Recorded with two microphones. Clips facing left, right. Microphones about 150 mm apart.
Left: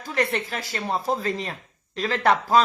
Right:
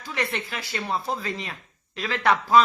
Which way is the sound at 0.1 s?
40° left (ahead or behind).